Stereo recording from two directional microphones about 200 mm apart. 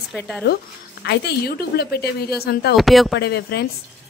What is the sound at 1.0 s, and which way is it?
A woman's voice, 55° left (ahead or behind).